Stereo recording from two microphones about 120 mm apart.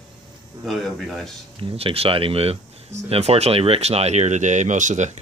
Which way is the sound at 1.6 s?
50° right (ahead or behind).